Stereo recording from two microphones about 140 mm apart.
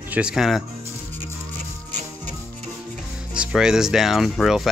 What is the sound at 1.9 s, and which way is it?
Music, 60° right (ahead or behind).